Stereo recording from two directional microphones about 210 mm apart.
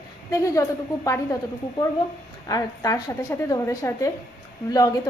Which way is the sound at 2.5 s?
15° left (ahead or behind).